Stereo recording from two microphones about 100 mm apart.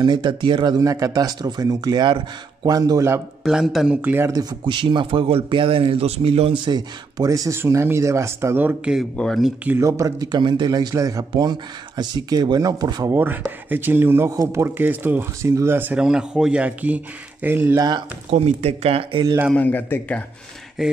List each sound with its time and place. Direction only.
0.0 s speech: 50° right (ahead or behind)
3.4 s speech: 5° right (ahead or behind)
4.0 s speech: 20° right (ahead or behind)
4.3 s speech: 40° right (ahead or behind)
4.6 s speech: 55° right (ahead or behind); by 6.5 s 75° right (ahead or behind)
6.6 s speech: 45° right (ahead or behind); by 8.9 s 20° right (ahead or behind)
9.1 s a man's voice: 10° left (ahead or behind)
9.8 s speech: 30° right (ahead or behind)
13.1 s speech: 20° right (ahead or behind)
16.0 s speech: 5° right (ahead or behind)
17.7 s speech: 45° right (ahead or behind)
18.4 s speech: 90° right; by 19.2 s 70° right (ahead or behind)
19.5 s a man's voice: 20° left (ahead or behind)
20.8 s speech: 5° right (ahead or behind)